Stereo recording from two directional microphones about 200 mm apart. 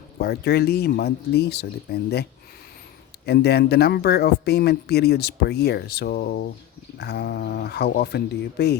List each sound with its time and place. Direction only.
0.2 s speech: 55° left (ahead or behind)
3.2 s speech: 55° left (ahead or behind)